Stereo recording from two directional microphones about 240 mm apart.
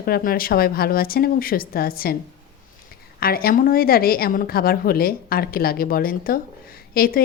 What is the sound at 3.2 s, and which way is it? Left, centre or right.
A woman's voice, left.